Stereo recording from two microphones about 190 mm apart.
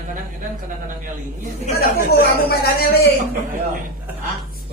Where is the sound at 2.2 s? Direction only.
55° left (ahead or behind).